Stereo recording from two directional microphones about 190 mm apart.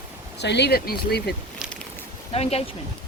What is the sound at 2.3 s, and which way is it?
Speech, 30° left (ahead or behind).